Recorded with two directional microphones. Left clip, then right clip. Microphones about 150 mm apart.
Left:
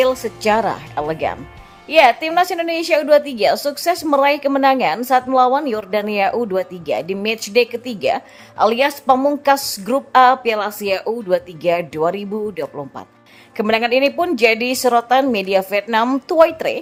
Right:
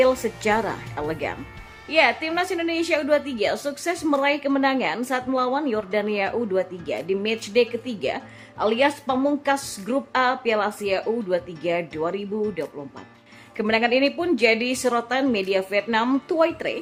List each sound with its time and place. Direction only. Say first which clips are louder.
0.0 s a woman's voice: left 3 dB; 30° left (ahead or behind)